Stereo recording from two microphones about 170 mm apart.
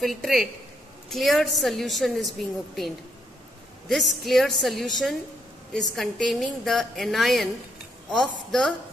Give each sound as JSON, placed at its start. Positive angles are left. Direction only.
{"t": 0.0, "sound": "a woman's voice", "side_deg": 0}
{"t": 3.9, "sound": "a woman's voice", "side_deg": 0}